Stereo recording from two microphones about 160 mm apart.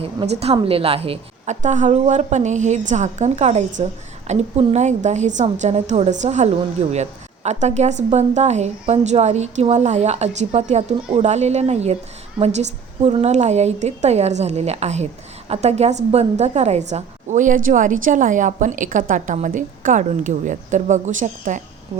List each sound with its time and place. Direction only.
0.0 s a woman's voice: 40° right (ahead or behind)